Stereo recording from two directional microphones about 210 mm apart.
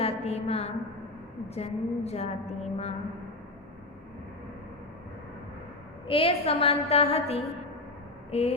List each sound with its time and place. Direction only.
0.0 s a sound: 30° left (ahead or behind)
1.5 s a woman's voice: 30° left (ahead or behind)
6.1 s a woman's voice: 25° left (ahead or behind)